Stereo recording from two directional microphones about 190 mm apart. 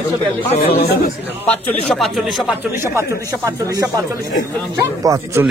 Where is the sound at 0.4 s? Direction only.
30° left (ahead or behind).